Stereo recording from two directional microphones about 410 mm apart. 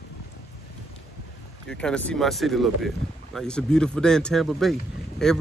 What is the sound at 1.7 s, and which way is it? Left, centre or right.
Speech, centre.